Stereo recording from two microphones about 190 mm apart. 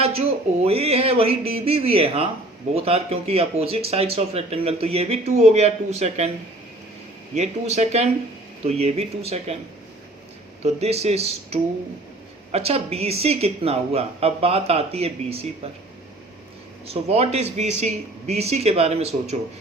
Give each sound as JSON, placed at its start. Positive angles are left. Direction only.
{"t": 0.0, "sound": "speech", "side_deg": -30}
{"t": 7.3, "sound": "speech", "side_deg": -35}
{"t": 10.6, "sound": "speech", "side_deg": -35}
{"t": 16.8, "sound": "speech", "side_deg": -30}